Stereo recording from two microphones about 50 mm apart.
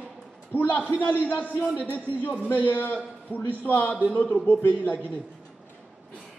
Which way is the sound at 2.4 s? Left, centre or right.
Left.